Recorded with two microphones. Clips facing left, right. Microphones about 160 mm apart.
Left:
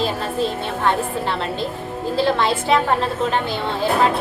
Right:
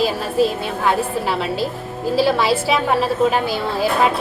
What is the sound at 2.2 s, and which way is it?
A woman's voice, 5° right (ahead or behind).